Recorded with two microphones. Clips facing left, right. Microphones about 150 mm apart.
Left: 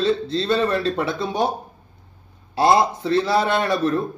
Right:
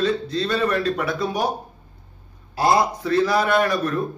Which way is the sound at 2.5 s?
25° left (ahead or behind).